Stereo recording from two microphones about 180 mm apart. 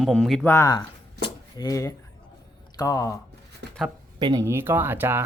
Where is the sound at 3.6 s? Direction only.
70° right (ahead or behind).